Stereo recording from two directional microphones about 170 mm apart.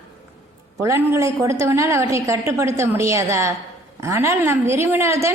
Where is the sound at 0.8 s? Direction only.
15° right (ahead or behind).